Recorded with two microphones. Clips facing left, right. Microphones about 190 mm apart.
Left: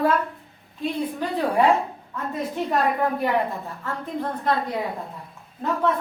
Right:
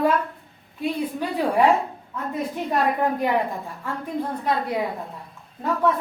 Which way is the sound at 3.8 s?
10° right (ahead or behind).